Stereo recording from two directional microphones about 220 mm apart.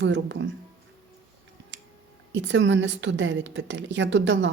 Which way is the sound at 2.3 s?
55° right (ahead or behind).